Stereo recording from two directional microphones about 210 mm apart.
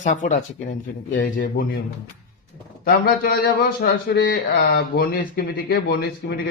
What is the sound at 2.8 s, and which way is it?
A man's voice, 45° left (ahead or behind).